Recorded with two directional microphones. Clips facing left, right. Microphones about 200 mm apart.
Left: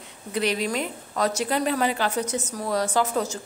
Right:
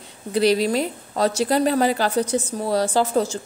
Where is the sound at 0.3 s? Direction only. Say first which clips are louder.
Right 7 dB; 35° right (ahead or behind).